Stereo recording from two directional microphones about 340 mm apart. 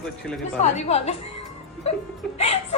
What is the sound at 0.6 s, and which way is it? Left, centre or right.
Speech, centre.